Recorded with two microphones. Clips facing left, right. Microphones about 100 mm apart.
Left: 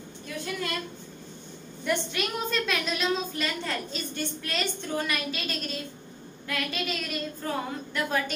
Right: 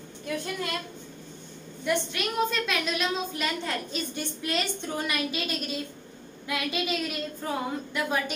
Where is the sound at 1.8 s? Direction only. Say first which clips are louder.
Right 1 dB; centre (ahead or behind).